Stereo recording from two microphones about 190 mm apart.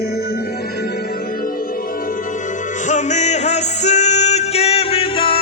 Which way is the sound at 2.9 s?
40° left (ahead or behind).